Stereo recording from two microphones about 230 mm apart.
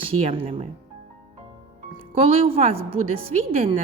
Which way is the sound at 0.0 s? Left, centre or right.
Right.